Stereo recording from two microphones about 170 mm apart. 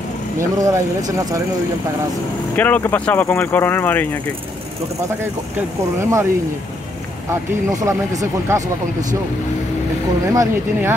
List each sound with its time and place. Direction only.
0.4 s speech: 15° right (ahead or behind)
2.5 s speech: 10° left (ahead or behind)
5.9 s speech: 15° right (ahead or behind)
7.7 s speech: 20° right (ahead or behind)
10.3 s speech: 15° right (ahead or behind)